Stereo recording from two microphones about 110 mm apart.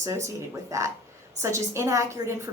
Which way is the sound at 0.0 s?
30° right (ahead or behind).